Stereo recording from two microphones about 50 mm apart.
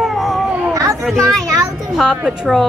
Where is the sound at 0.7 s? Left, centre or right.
Right.